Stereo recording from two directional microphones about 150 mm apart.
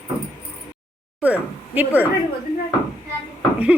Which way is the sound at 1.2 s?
10° right (ahead or behind).